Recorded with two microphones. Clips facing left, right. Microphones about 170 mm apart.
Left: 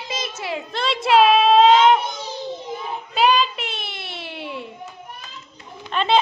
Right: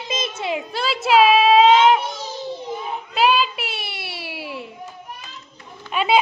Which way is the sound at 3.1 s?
5° right (ahead or behind).